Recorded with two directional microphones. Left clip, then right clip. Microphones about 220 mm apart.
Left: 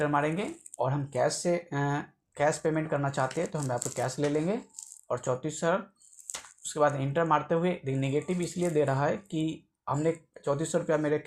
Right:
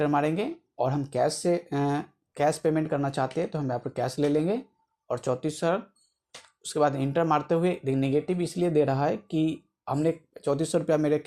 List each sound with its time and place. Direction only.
0.0 s speech: 45° right (ahead or behind)